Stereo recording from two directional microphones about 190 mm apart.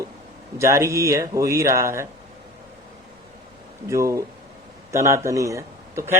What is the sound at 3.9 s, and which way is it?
A man's voice, 15° right (ahead or behind).